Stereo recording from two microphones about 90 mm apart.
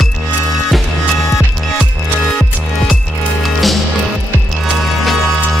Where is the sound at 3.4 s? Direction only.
Centre (ahead or behind).